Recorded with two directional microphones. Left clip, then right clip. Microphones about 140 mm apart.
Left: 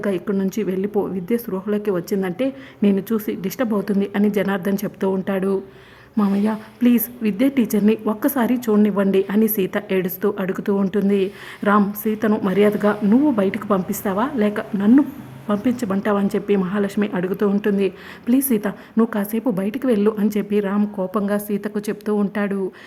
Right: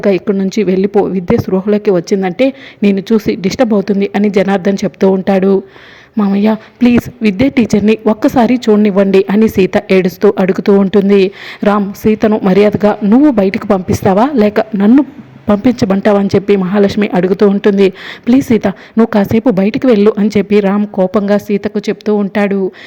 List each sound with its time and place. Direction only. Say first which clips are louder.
0.0 s a woman's voice: right 10 dB; 25° right (ahead or behind)